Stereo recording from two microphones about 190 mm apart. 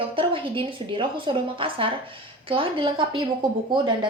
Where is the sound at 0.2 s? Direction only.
25° right (ahead or behind).